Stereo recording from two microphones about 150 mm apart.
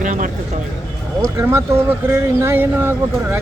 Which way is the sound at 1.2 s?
20° right (ahead or behind).